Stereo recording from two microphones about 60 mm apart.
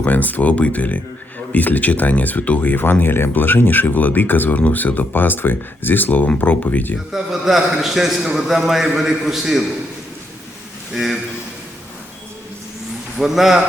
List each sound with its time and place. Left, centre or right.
0.0 s speech: left
7.1 s a man's voice: centre
10.9 s speech: centre
13.1 s a man's voice: centre